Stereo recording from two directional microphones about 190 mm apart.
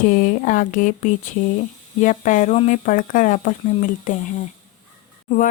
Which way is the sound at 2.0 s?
40° left (ahead or behind).